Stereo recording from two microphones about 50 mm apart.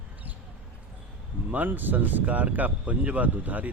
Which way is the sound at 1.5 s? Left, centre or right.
Right.